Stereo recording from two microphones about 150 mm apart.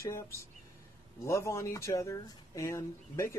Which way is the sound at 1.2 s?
20° left (ahead or behind).